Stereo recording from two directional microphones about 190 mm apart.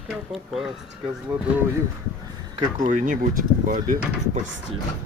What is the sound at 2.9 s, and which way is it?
Speech, 45° right (ahead or behind).